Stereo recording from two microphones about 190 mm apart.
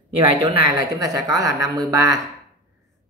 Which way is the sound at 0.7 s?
20° right (ahead or behind).